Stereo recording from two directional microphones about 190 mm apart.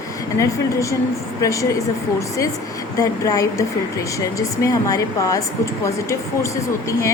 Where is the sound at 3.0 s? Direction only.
20° left (ahead or behind).